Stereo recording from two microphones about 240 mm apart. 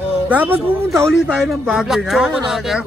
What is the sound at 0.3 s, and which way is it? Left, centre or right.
Speech, centre.